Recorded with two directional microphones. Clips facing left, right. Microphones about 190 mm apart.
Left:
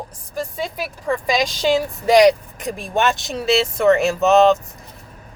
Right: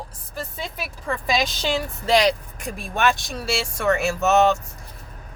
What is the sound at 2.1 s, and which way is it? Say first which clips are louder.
Speech: left 7 dB; 15° left (ahead or behind).